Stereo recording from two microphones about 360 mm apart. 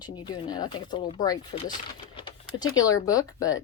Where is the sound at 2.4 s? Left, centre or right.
Centre.